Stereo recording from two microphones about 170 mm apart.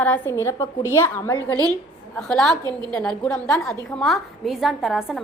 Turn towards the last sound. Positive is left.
turn(degrees=0)  # may be behind; listen again after turning